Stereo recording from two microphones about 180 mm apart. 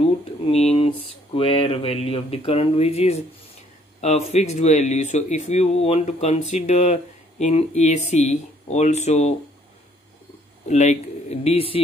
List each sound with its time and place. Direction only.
0.0 s speech: 35° left (ahead or behind)
10.7 s speech: 40° left (ahead or behind)